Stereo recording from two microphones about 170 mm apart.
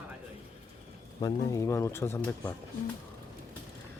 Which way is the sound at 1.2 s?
20° left (ahead or behind).